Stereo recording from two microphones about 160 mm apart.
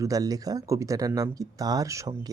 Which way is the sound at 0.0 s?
20° right (ahead or behind).